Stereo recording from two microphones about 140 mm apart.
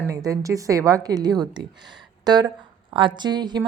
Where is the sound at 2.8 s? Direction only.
35° right (ahead or behind).